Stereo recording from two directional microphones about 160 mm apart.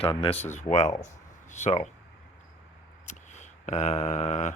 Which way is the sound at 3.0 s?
45° left (ahead or behind).